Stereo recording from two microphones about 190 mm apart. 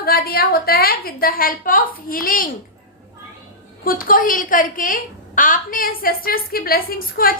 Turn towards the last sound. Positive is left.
turn(degrees=50)  # may be behind; listen again after turning